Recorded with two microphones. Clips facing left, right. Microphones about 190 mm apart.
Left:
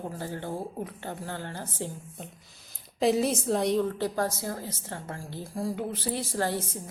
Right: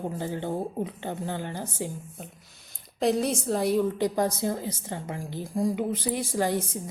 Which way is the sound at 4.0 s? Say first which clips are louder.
Right 4 dB; 15° right (ahead or behind).